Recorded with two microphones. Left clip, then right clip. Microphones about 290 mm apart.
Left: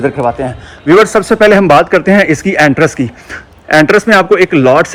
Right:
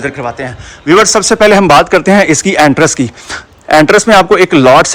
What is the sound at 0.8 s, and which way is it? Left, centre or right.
Speech, centre.